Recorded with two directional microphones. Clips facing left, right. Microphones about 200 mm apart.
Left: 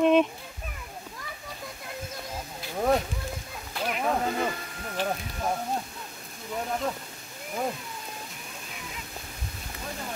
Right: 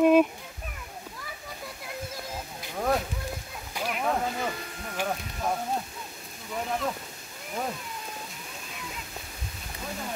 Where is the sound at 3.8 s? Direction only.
15° right (ahead or behind).